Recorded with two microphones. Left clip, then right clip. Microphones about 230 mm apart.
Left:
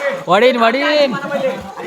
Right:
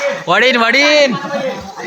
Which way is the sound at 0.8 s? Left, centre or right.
Right.